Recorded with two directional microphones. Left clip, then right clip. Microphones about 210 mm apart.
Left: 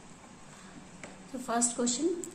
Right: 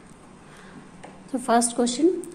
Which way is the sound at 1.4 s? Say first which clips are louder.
Right 10 dB; 35° right (ahead or behind).